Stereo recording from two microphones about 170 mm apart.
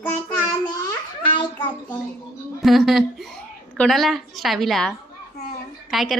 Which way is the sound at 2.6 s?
Centre (ahead or behind).